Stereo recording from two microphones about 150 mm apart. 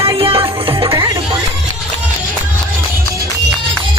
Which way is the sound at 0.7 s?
20° right (ahead or behind).